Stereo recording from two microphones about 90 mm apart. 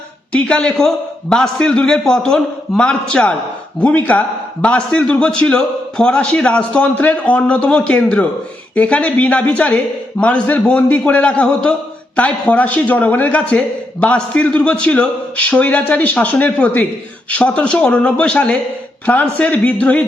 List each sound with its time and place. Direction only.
0.3 s a man's voice: 10° left (ahead or behind)